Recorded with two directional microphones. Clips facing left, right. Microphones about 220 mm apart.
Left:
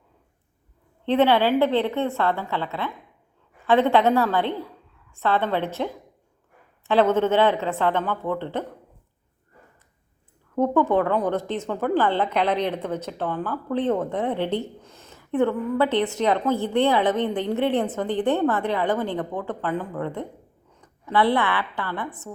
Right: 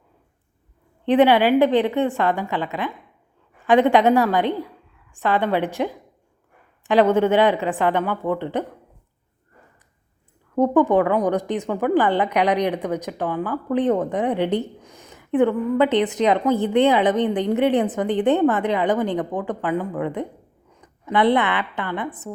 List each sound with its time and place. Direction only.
1.0 s a woman's voice: 15° right (ahead or behind)
10.5 s a woman's voice: 15° right (ahead or behind)